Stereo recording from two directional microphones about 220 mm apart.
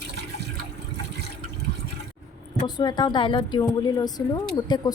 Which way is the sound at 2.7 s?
20° left (ahead or behind).